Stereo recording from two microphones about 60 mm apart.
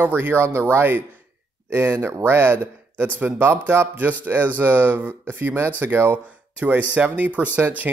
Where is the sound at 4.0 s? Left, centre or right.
Right.